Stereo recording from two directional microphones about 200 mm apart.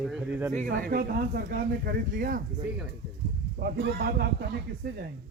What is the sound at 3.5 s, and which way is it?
Speech, 50° right (ahead or behind).